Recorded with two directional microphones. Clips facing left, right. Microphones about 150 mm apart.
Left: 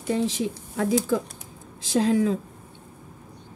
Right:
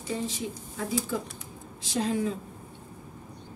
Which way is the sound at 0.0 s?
75° left (ahead or behind).